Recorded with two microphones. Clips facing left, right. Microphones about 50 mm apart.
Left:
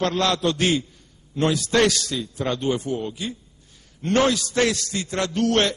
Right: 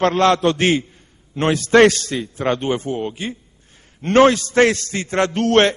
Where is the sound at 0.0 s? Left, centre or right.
Right.